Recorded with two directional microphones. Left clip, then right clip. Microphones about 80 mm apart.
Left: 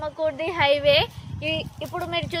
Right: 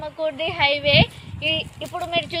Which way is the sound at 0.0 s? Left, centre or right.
Left.